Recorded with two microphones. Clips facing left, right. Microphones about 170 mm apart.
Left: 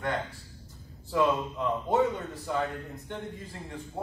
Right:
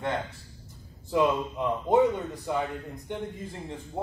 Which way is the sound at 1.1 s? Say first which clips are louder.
Right 2 dB; 15° right (ahead or behind).